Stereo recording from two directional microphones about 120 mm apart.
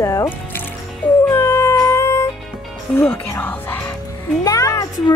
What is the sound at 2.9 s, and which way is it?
Speech, 15° left (ahead or behind).